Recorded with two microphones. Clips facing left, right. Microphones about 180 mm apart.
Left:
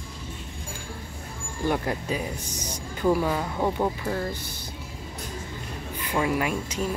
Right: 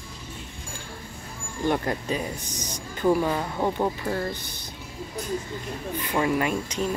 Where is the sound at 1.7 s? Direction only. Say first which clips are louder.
Right 1 dB; 5° left (ahead or behind).